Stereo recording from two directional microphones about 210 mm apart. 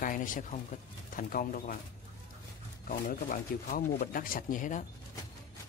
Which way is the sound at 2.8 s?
40° left (ahead or behind).